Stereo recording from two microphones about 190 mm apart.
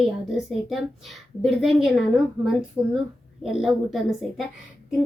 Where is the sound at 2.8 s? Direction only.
15° right (ahead or behind).